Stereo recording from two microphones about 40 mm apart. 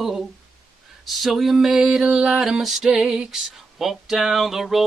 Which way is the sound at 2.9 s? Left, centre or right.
Right.